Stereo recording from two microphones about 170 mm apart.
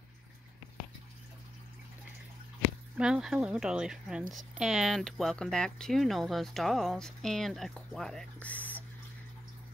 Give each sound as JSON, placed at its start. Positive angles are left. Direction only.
{"t": 3.0, "sound": "speech", "side_deg": -5}